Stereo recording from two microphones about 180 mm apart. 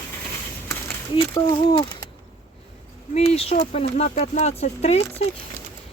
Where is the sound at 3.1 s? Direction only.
35° left (ahead or behind).